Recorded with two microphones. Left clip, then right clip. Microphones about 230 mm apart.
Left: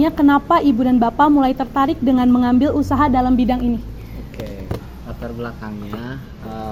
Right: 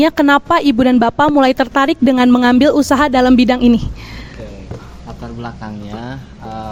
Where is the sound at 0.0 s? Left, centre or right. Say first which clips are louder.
Right 4 dB; right.